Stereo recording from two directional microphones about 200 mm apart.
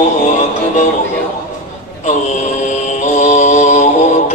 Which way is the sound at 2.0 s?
35° left (ahead or behind).